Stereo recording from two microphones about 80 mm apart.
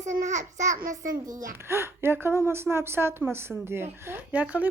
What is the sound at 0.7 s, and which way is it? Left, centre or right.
Speech, right.